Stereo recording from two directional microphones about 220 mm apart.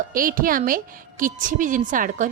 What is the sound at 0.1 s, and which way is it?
A woman's voice, 40° right (ahead or behind).